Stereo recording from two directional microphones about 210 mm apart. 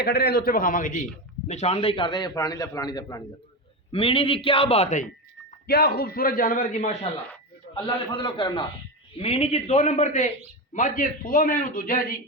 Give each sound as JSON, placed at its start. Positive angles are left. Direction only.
{"t": 0.0, "sound": "a man's voice", "side_deg": 50}
{"t": 5.6, "sound": "a man's voice", "side_deg": 50}
{"t": 7.7, "sound": "a man's voice", "side_deg": 25}